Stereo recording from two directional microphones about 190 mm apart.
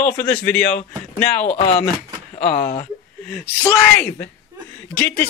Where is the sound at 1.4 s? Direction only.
30° left (ahead or behind).